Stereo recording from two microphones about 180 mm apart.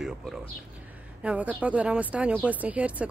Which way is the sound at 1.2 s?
5° right (ahead or behind).